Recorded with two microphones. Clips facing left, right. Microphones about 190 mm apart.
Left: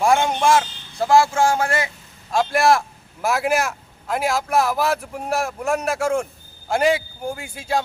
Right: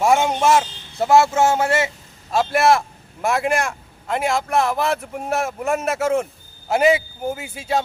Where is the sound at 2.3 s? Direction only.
Centre (ahead or behind).